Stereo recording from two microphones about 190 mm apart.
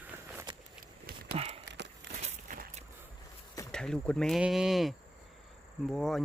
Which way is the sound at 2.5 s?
45° right (ahead or behind).